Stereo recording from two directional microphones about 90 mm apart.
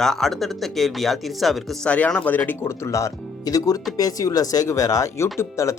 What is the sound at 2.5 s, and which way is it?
Speech, 30° left (ahead or behind).